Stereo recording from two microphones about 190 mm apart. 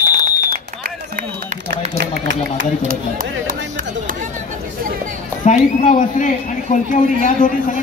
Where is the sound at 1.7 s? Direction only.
65° right (ahead or behind).